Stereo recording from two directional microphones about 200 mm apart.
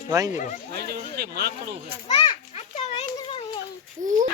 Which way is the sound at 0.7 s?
50° right (ahead or behind).